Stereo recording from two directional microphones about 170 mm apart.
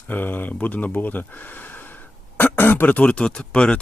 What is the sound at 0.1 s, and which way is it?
Speech, 10° left (ahead or behind).